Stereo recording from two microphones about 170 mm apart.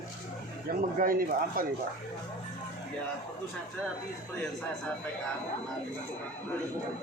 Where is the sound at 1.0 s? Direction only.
55° right (ahead or behind).